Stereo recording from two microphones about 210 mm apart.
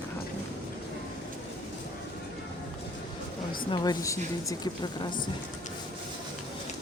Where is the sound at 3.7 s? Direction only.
20° left (ahead or behind).